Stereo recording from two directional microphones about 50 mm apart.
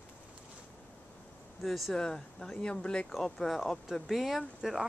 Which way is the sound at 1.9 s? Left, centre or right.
Centre.